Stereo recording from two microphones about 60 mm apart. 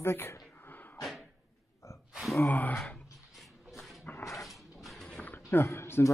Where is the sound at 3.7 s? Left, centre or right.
Centre.